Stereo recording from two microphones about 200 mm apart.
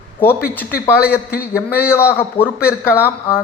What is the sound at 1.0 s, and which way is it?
Speech, 50° left (ahead or behind).